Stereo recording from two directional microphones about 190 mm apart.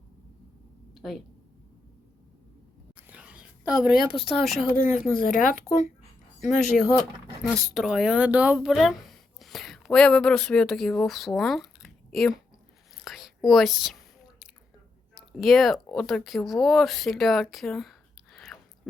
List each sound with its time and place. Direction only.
0.9 s speech: centre (ahead or behind)
3.1 s speech: 5° right (ahead or behind)
4.8 s speech: 45° left (ahead or behind)
6.4 s speech: centre (ahead or behind)
15.1 s speech: centre (ahead or behind)
18.5 s a sound: 10° left (ahead or behind)